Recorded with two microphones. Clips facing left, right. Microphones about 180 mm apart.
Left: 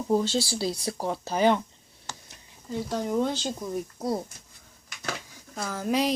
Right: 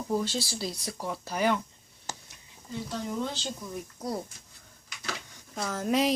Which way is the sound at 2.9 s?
50° left (ahead or behind).